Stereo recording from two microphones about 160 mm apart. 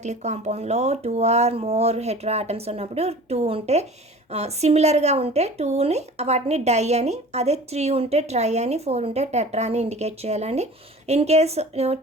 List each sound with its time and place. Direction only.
0.0 s a woman's voice: 45° right (ahead or behind)